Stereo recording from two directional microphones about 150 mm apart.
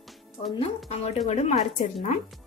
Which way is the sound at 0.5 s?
45° left (ahead or behind).